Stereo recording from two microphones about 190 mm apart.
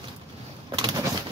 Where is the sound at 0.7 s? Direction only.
25° right (ahead or behind).